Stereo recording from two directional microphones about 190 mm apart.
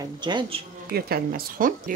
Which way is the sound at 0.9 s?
55° right (ahead or behind).